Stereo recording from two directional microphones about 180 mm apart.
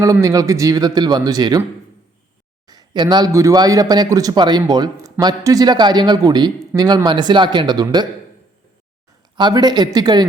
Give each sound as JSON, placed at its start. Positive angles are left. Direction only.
{"t": 0.0, "sound": "a man's voice", "side_deg": -15}
{"t": 2.6, "sound": "a man's voice", "side_deg": -25}
{"t": 9.3, "sound": "a man's voice", "side_deg": -25}